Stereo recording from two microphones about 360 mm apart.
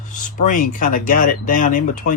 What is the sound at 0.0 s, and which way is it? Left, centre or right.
Speech, left.